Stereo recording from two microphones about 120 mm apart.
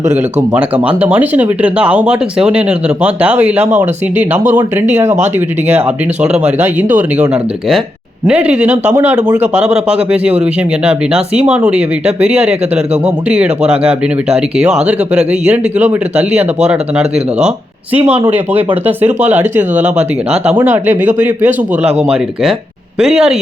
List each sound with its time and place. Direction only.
0.0 s speech: 20° right (ahead or behind)
6.6 s speech: 15° right (ahead or behind)
8.3 s speech: 10° right (ahead or behind)
23.0 s speech: 5° right (ahead or behind)